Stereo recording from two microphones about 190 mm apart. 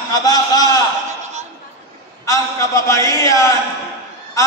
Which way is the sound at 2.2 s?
15° left (ahead or behind).